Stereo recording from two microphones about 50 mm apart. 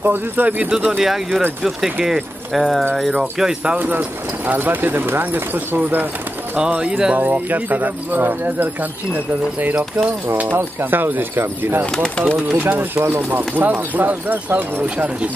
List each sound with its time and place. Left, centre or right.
0.0 s speech: right
0.7 s speech: right
1.0 s speech: centre
2.5 s speech: centre
3.7 s speech: right
6.5 s speech: right
7.2 s speech: right
10.8 s speech: right
11.9 s speech: centre
12.4 s speech: right